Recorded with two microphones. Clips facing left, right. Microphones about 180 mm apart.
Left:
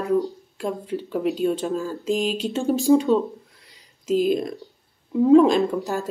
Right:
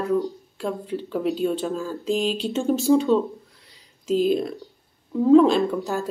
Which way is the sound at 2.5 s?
10° left (ahead or behind).